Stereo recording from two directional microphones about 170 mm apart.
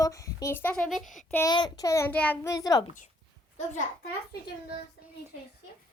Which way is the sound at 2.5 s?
20° left (ahead or behind).